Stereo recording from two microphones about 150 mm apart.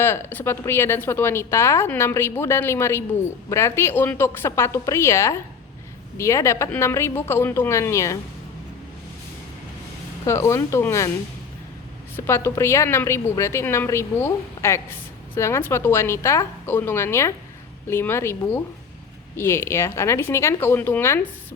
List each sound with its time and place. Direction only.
0.0 s a woman's voice: 15° left (ahead or behind)
10.2 s a woman's voice: 20° left (ahead or behind)
12.1 s a woman's voice: 15° left (ahead or behind)